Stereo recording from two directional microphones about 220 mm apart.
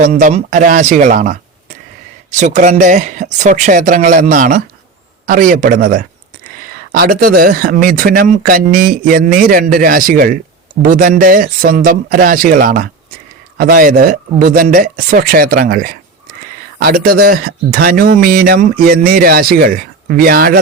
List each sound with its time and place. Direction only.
0.0 s speech: 35° right (ahead or behind)